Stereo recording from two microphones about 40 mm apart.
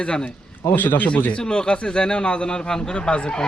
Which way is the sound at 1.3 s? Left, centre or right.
Left.